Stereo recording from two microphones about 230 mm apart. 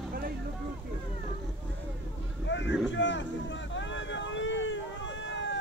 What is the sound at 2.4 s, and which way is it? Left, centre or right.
Vehicle, left.